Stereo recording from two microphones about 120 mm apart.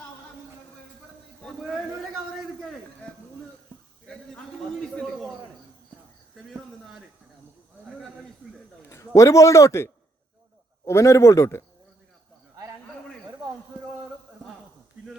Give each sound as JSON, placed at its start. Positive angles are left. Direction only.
{"t": 6.3, "sound": "speech", "side_deg": 0}
{"t": 8.9, "sound": "a man's voice", "side_deg": 25}